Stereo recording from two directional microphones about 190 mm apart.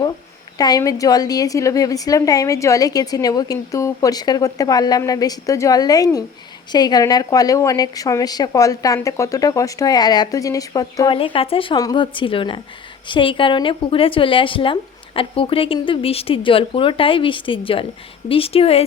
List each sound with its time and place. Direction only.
0.6 s a woman's voice: 20° left (ahead or behind)